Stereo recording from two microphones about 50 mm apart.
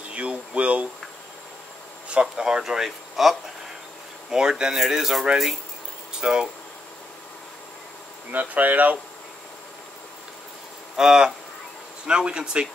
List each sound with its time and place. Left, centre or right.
0.1 s a sound: right
2.0 s speech: right
2.4 s speech: centre
6.2 s speech: centre
8.3 s speech: right
11.0 s speech: centre